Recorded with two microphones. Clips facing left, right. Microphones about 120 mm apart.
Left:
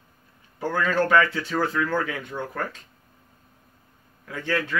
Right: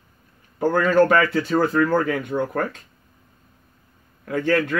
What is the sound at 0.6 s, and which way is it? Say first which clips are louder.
A man's voice: right 7 dB; 45° right (ahead or behind).